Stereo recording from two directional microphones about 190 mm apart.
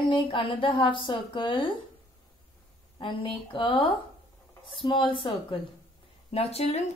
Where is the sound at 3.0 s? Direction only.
25° left (ahead or behind).